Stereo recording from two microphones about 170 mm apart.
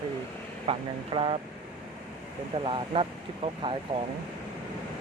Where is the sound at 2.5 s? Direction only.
30° right (ahead or behind).